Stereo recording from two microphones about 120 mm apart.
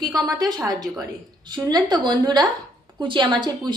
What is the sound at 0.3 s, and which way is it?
A woman's voice, 35° right (ahead or behind).